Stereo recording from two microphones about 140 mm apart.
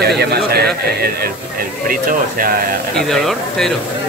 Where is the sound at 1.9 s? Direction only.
85° right.